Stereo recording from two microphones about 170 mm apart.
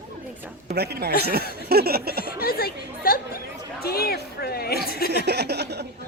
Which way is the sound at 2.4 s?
60° left (ahead or behind).